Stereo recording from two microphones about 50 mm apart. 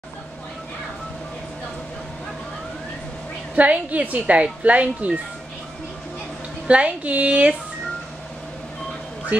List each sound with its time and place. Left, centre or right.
3.5 s speech: right
6.7 s speech: right